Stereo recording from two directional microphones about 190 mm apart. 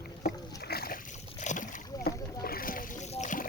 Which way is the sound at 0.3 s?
20° left (ahead or behind).